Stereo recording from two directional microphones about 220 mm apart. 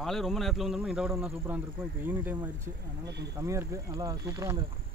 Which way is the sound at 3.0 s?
50° right (ahead or behind).